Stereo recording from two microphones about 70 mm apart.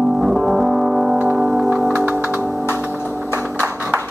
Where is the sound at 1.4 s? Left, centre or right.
Centre.